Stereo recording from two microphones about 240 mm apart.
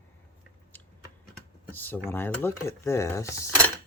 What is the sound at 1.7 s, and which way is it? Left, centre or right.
Speech, centre.